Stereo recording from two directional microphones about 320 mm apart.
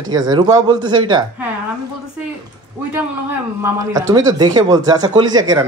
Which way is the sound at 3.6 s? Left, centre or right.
Centre.